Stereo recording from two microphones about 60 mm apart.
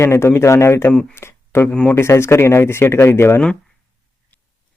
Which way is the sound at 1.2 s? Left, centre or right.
Left.